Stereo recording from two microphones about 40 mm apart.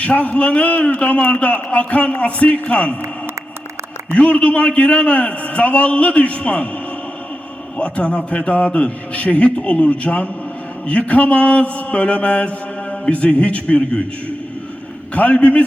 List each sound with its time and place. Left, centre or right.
0.0 s mantra: left
4.1 s mantra: left
7.8 s mantra: left
15.1 s mantra: left